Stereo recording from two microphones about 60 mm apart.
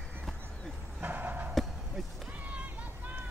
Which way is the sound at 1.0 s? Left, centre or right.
Right.